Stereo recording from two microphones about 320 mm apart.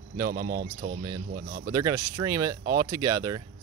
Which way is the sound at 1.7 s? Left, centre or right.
Centre.